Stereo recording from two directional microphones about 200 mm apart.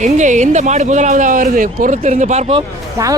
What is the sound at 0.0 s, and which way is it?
Speech, 35° right (ahead or behind).